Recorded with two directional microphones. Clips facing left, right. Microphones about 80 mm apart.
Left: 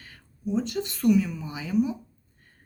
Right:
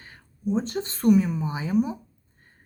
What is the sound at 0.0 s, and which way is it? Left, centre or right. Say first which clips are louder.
Speech: right 4 dB; right.